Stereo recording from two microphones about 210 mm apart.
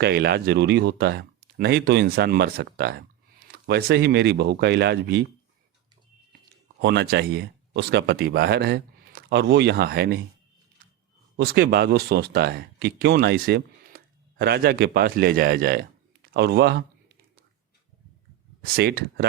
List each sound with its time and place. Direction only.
0.0 s speech: 50° right (ahead or behind)
6.8 s speech: 50° right (ahead or behind)
11.3 s speech: 50° right (ahead or behind)
18.6 s speech: 50° right (ahead or behind)